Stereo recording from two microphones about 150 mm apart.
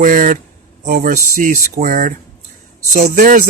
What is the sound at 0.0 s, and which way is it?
Speech, 60° right (ahead or behind).